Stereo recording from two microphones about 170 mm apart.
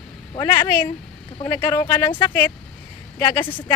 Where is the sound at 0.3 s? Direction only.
25° left (ahead or behind).